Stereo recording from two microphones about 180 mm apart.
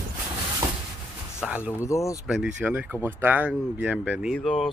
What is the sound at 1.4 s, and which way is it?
Speech, 5° right (ahead or behind).